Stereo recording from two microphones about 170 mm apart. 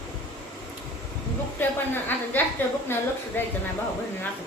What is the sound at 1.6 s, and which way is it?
Speech, 10° left (ahead or behind).